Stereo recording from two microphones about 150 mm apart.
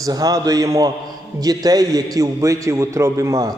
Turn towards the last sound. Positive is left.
turn(degrees=-20)  # may be behind; listen again after turning